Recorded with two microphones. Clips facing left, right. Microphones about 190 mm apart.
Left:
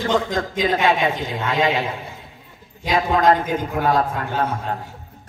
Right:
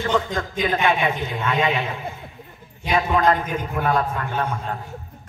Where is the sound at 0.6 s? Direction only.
90° left.